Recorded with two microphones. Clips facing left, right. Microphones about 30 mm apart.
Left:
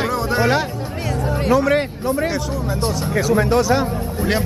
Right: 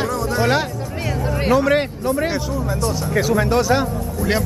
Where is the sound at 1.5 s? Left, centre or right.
Centre.